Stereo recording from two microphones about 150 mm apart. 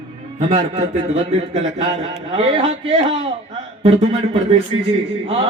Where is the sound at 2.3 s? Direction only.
40° right (ahead or behind).